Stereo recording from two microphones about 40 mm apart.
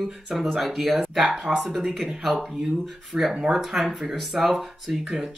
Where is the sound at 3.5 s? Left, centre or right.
Centre.